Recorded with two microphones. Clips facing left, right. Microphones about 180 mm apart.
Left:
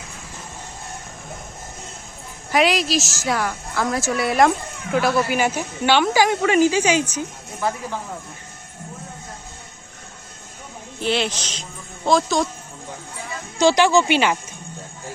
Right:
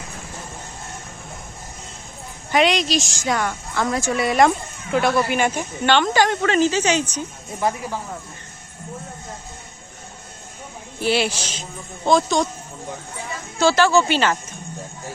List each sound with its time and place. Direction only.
2.5 s a woman's voice: centre (ahead or behind)
7.6 s a man's voice: 20° right (ahead or behind)
11.0 s a man's voice: 10° right (ahead or behind)
13.6 s speech: 15° left (ahead or behind)